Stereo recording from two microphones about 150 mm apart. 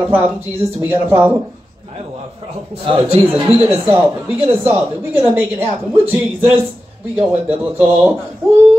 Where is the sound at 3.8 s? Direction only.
15° right (ahead or behind).